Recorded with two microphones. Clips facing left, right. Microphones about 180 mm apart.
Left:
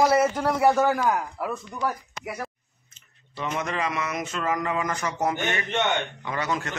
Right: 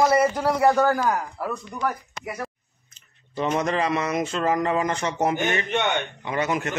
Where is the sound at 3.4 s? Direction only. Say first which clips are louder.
Right 5 dB; 35° right (ahead or behind).